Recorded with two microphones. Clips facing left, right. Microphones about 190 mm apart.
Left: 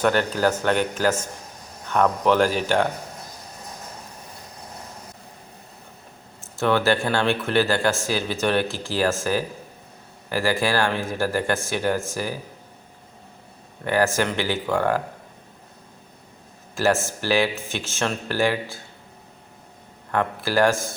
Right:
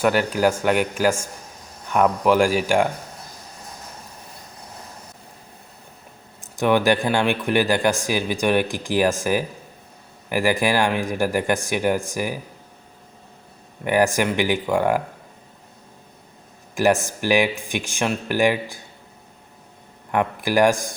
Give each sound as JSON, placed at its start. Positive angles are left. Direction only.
{"t": 0.0, "sound": "a man's voice", "side_deg": -10}
{"t": 6.4, "sound": "a man's voice", "side_deg": -15}
{"t": 13.8, "sound": "a man's voice", "side_deg": -15}
{"t": 16.7, "sound": "a man's voice", "side_deg": -15}
{"t": 20.1, "sound": "a man's voice", "side_deg": -15}